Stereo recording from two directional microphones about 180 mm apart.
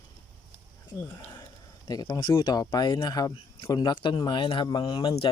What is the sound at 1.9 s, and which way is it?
Speech, 25° left (ahead or behind).